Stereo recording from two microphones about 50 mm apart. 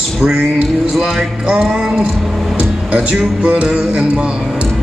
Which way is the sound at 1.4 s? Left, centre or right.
Centre.